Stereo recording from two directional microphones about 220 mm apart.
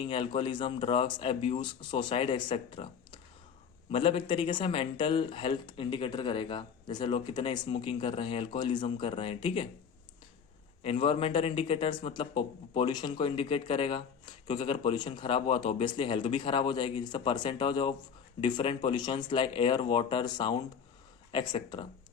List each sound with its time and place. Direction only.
0.0 s speech: 25° left (ahead or behind)
10.8 s speech: 25° left (ahead or behind)